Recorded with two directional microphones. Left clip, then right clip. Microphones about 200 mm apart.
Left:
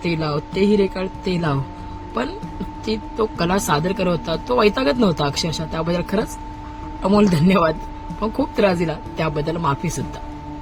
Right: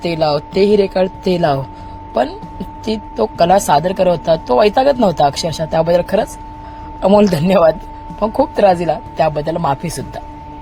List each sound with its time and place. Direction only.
0.0 s a woman's voice: 30° right (ahead or behind)
2.8 s speech: 25° right (ahead or behind)